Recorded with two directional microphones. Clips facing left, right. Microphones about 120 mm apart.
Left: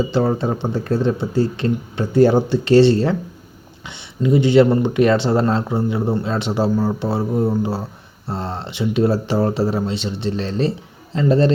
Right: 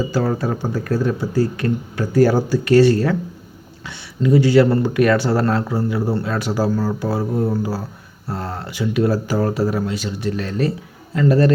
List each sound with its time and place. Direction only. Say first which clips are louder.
0.1 s speech: left 2 dB; 25° left (ahead or behind)